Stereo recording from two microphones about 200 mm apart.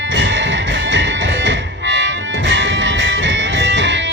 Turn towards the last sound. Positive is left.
turn(degrees=-65)  # may be behind; listen again after turning